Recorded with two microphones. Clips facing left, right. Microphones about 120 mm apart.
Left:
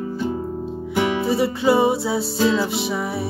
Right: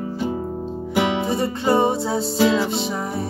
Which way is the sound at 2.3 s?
25° right (ahead or behind).